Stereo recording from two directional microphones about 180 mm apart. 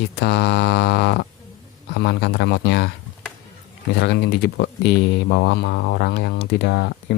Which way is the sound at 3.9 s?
70° left (ahead or behind).